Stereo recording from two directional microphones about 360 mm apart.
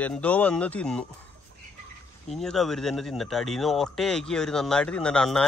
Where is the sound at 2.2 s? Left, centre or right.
Centre.